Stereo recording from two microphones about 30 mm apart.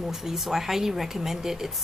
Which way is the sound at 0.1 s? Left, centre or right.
Centre.